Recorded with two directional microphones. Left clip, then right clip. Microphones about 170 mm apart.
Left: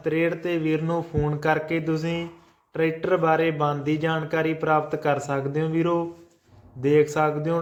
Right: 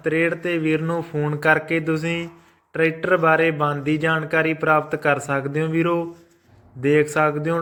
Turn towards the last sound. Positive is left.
turn(degrees=-15)  # may be behind; listen again after turning